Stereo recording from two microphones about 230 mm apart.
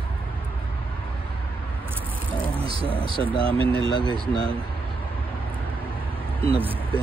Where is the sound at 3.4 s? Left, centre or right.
Right.